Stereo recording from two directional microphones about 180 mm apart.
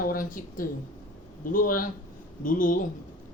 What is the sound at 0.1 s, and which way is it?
Speech, 50° left (ahead or behind).